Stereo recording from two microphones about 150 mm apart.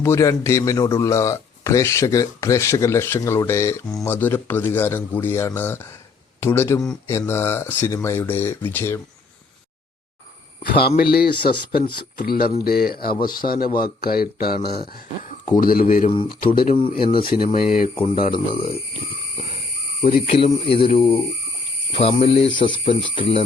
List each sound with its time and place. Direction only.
0.0 s a man's voice: 20° left (ahead or behind)
10.6 s speech: 90° left
12.1 s speech: 80° left
12.6 s speech: 90° left
13.4 s speech: 55° left (ahead or behind)
13.7 s speech: 90° left
15.6 s speech: 70° left (ahead or behind)
17.0 s speech: 35° left (ahead or behind)
17.2 s speech: 70° left (ahead or behind)
20.0 s speech: 40° left (ahead or behind)